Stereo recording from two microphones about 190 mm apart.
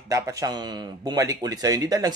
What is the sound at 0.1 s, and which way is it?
A man's voice, 15° right (ahead or behind).